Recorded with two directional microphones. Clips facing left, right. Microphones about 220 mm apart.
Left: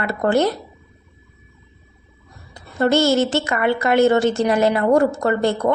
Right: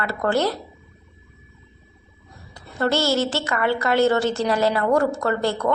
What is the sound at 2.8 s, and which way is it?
A woman's voice, 20° left (ahead or behind).